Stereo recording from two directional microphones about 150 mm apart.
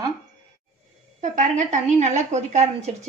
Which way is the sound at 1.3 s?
55° right (ahead or behind).